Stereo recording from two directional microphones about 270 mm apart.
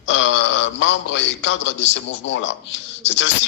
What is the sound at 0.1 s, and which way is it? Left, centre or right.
A man's voice, left.